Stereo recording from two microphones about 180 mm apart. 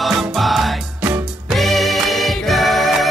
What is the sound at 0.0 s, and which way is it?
Music, centre (ahead or behind).